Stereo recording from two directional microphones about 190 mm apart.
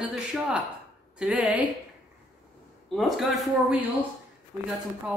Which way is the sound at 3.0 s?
Centre (ahead or behind).